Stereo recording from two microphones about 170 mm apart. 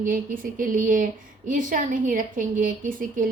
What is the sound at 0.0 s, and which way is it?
A woman's voice, 55° right (ahead or behind).